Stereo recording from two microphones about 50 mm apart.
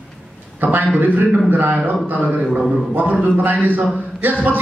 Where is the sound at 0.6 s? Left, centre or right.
Right.